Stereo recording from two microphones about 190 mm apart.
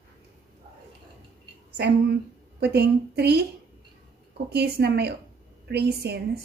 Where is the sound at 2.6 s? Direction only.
60° right (ahead or behind).